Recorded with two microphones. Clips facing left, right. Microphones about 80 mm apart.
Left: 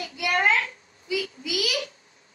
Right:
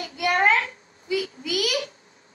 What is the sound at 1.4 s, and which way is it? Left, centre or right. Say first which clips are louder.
Speech: right 3 dB; right.